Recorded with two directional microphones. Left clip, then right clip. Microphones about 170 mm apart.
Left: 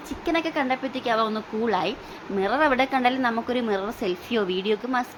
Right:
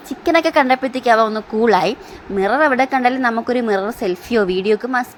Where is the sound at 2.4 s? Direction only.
30° right (ahead or behind).